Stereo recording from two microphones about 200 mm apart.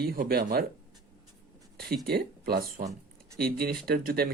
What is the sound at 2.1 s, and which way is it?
Speech, 50° right (ahead or behind).